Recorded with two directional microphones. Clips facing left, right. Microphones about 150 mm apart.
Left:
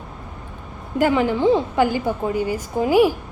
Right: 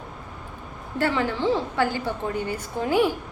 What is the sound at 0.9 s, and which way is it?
A woman's voice, 15° left (ahead or behind).